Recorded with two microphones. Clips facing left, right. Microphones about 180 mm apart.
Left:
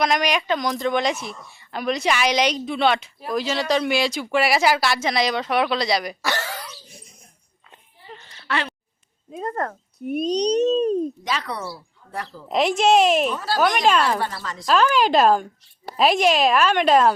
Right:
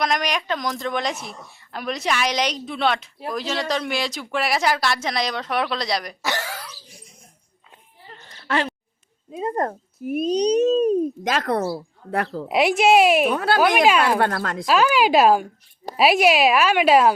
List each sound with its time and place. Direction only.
0.0 s a woman's voice: centre (ahead or behind)
6.2 s throat clearing: 15° right (ahead or behind)
6.5 s cough: centre (ahead or behind)
8.3 s a sound: 45° right (ahead or behind)
9.6 s speech: 20° right (ahead or behind)
10.0 s speech: 5° right (ahead or behind)
11.2 s speech: 50° right (ahead or behind)
11.6 s speech: 60° right (ahead or behind)
12.5 s speech: 10° right (ahead or behind)
13.2 s speech: 60° right (ahead or behind)
14.7 s speech: 10° right (ahead or behind)